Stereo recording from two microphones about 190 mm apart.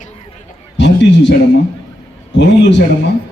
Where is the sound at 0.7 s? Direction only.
70° left (ahead or behind).